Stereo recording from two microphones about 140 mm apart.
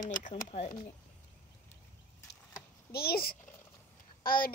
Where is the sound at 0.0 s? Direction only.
70° left (ahead or behind).